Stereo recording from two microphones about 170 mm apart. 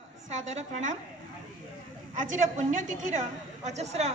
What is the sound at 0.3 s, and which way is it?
Speech, 45° right (ahead or behind).